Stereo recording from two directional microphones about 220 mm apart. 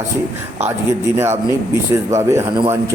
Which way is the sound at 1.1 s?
10° right (ahead or behind).